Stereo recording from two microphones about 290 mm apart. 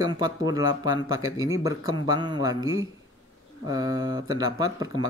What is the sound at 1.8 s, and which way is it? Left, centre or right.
Speech, left.